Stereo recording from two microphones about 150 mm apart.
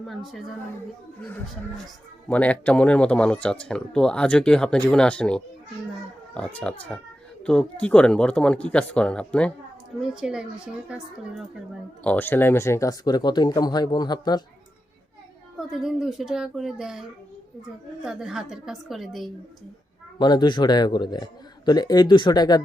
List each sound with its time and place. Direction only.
0.1 s speech: centre (ahead or behind)
2.3 s speech: 10° left (ahead or behind)
10.0 s speech: 5° right (ahead or behind)
12.0 s speech: 15° left (ahead or behind)
15.5 s speech: 5° right (ahead or behind)
18.0 s speech: 5° right (ahead or behind)
20.1 s speech: 30° left (ahead or behind)